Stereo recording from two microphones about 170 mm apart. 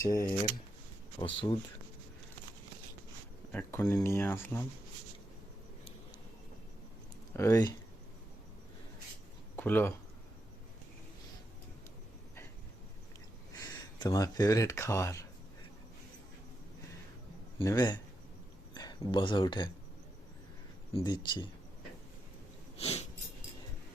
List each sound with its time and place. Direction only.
1.2 s speech: 30° left (ahead or behind)
3.5 s speech: 10° left (ahead or behind)
7.3 s speech: 20° left (ahead or behind)
9.6 s speech: 10° left (ahead or behind)
13.6 s speech: 20° left (ahead or behind)
17.6 s speech: 20° left (ahead or behind)
20.9 s speech: 25° left (ahead or behind)
22.8 s sniff: 35° left (ahead or behind)